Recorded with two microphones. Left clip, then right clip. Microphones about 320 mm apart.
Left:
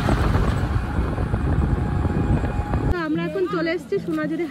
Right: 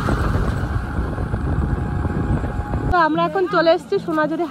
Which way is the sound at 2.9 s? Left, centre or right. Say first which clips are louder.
Right 10 dB; centre.